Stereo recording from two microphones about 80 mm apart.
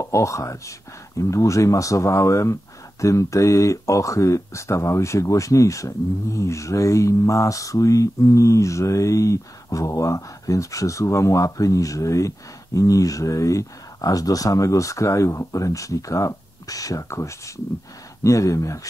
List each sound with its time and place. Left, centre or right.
0.0 s speech: left